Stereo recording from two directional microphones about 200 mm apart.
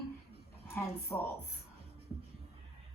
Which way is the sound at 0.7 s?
10° left (ahead or behind).